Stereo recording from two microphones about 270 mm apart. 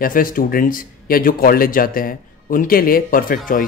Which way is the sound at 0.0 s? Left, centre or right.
Left.